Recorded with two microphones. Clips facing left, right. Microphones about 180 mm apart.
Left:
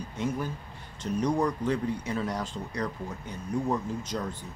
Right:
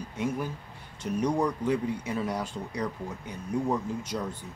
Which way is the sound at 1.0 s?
10° right (ahead or behind).